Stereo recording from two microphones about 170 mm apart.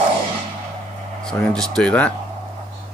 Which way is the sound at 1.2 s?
5° left (ahead or behind).